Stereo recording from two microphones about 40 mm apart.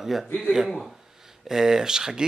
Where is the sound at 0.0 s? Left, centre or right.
Centre.